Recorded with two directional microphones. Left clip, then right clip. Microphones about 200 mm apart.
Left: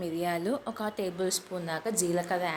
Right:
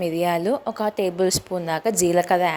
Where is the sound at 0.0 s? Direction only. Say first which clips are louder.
Right 9 dB; 35° right (ahead or behind).